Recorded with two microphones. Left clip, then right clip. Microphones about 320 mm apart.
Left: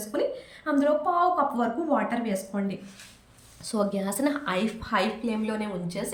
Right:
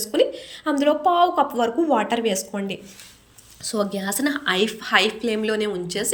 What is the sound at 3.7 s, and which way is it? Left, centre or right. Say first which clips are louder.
A woman's voice: right 3 dB; centre.